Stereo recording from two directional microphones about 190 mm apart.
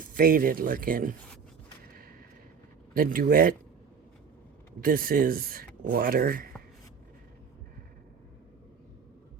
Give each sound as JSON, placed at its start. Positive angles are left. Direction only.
{"t": 0.0, "sound": "speech", "side_deg": -45}
{"t": 2.9, "sound": "speech", "side_deg": -50}
{"t": 4.8, "sound": "speech", "side_deg": -50}